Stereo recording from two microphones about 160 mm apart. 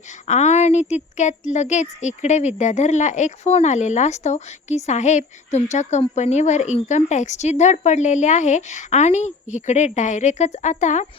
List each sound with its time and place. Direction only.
0.3 s speech: 45° left (ahead or behind)